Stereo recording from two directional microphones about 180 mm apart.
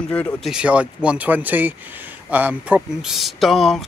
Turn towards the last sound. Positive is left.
turn(degrees=0)  # may be behind; listen again after turning